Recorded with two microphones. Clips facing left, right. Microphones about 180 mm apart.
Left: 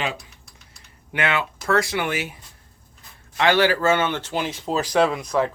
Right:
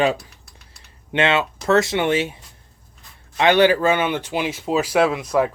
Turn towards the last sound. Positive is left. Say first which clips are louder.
# right 2 dB
turn(degrees=-10)  # may be behind; listen again after turning